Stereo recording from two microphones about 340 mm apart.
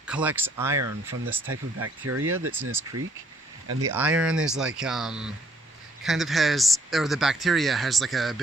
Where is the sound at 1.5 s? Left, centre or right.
Right.